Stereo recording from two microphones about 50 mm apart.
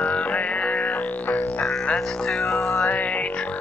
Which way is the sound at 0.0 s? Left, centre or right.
Left.